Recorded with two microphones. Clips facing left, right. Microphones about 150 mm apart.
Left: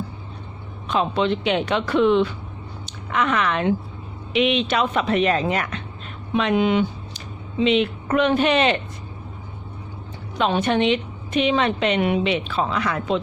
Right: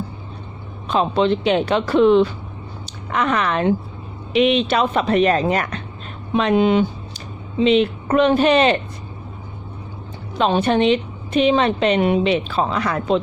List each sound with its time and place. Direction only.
0.9 s a woman's voice: 35° right (ahead or behind)
10.3 s a woman's voice: 30° right (ahead or behind)